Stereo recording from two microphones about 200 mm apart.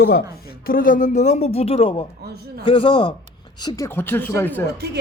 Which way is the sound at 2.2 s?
55° right (ahead or behind).